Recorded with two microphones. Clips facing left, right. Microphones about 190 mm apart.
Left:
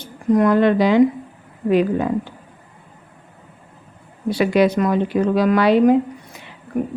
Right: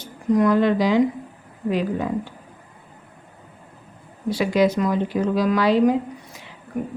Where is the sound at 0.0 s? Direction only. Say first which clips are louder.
Left 3 dB; 55° left (ahead or behind).